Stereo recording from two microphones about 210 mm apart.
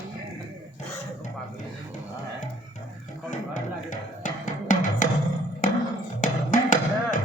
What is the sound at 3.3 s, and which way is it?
Music, 35° left (ahead or behind).